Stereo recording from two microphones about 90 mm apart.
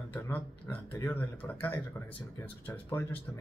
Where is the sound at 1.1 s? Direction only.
20° left (ahead or behind).